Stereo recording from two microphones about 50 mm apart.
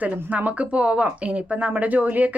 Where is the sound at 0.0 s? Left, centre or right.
Right.